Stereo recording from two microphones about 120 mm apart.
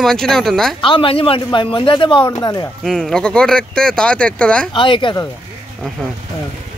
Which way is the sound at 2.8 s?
Centre (ahead or behind).